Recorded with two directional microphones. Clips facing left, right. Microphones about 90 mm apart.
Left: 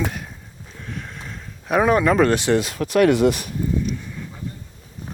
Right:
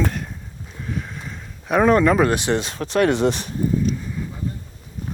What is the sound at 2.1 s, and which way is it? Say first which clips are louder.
Speech: left 2 dB; 15° right (ahead or behind).